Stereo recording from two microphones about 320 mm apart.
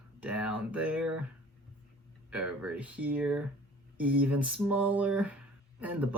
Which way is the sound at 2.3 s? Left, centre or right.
Centre.